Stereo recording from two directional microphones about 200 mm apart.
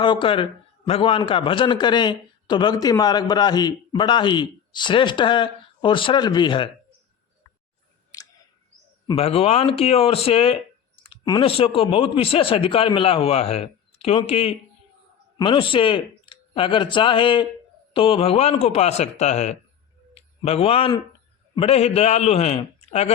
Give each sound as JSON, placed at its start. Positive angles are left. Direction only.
{"t": 0.0, "sound": "a man's voice", "side_deg": 25}
{"t": 9.0, "sound": "a man's voice", "side_deg": 30}